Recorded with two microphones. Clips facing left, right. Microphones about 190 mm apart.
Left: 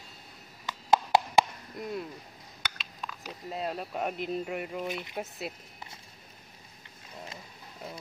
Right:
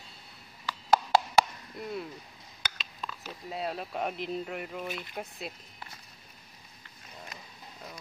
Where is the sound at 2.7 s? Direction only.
10° left (ahead or behind).